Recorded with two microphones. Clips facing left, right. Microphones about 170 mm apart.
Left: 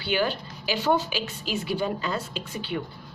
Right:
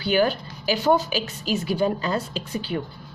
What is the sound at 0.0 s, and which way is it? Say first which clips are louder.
A woman's voice: right 5 dB; 45° right (ahead or behind).